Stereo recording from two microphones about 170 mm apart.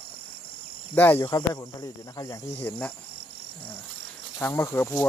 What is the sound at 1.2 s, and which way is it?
Speech, 25° left (ahead or behind).